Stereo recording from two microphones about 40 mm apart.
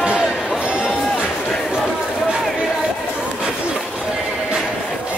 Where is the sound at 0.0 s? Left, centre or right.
Right.